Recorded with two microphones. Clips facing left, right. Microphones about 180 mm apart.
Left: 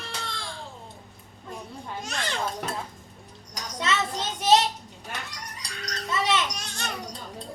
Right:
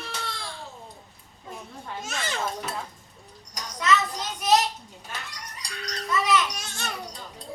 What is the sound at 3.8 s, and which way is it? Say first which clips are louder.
Child singing: right 3 dB; 25° left (ahead or behind).